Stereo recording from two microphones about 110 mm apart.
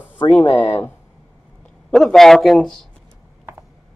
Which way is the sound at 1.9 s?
5° left (ahead or behind).